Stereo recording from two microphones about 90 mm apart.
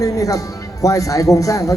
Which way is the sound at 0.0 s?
40° left (ahead or behind).